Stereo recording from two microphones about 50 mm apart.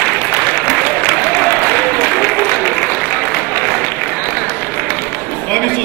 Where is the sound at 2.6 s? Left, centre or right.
Centre.